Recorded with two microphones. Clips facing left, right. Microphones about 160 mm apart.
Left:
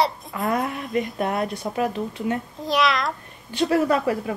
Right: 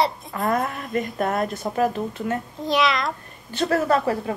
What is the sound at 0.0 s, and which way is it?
Hiccup, centre (ahead or behind).